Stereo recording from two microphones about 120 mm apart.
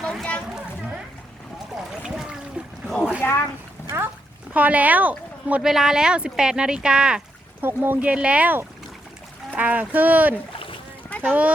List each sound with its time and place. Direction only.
0.0 s a sound: 5° left (ahead or behind)
1.9 s a sound: 5° right (ahead or behind)
3.2 s speech: 20° left (ahead or behind)
3.8 s dog: 20° right (ahead or behind)
4.5 s speech: 15° right (ahead or behind)
7.6 s speech: 20° right (ahead or behind)